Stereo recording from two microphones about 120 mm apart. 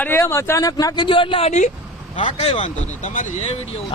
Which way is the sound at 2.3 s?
55° left (ahead or behind).